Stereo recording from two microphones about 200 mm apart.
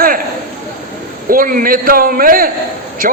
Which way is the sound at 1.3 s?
45° right (ahead or behind).